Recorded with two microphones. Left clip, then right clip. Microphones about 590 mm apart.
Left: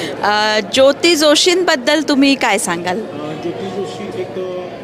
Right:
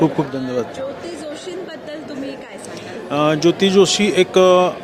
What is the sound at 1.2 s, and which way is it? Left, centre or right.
A woman's voice, left.